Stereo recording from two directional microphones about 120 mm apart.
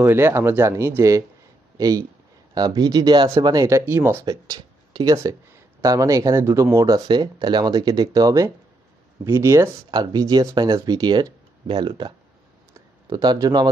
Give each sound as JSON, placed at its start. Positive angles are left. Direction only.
{"t": 0.0, "sound": "speech", "side_deg": -20}
{"t": 4.3, "sound": "speech", "side_deg": -30}
{"t": 7.1, "sound": "speech", "side_deg": -40}
{"t": 9.8, "sound": "speech", "side_deg": -35}
{"t": 13.1, "sound": "speech", "side_deg": -35}